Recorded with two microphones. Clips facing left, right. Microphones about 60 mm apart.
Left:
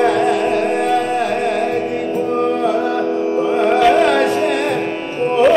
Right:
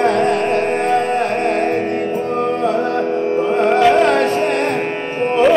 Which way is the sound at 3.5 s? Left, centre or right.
Centre.